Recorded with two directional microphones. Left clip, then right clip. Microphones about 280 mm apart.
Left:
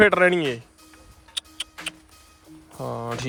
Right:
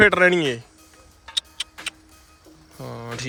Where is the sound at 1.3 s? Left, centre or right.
Centre.